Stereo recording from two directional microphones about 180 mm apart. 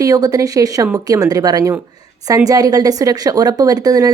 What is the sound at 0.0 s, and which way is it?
A woman's voice, 20° right (ahead or behind).